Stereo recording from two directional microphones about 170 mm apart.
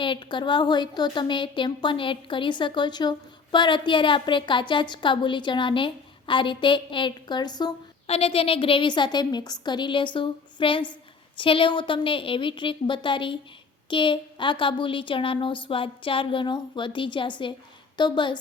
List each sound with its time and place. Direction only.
0.0 s a woman's voice: 30° left (ahead or behind)
8.0 s a woman's voice: 35° left (ahead or behind)